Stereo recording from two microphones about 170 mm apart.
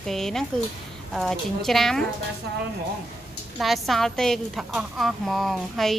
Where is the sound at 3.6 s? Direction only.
Centre (ahead or behind).